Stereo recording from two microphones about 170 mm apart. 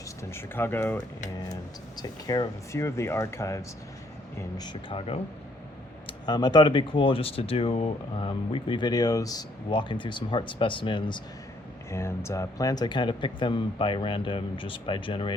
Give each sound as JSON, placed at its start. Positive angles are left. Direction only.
{"t": 0.2, "sound": "speech", "side_deg": 15}
{"t": 2.0, "sound": "speech", "side_deg": 25}
{"t": 11.9, "sound": "speech", "side_deg": 15}